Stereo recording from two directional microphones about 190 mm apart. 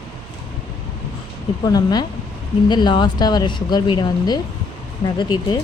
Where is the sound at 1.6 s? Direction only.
20° left (ahead or behind).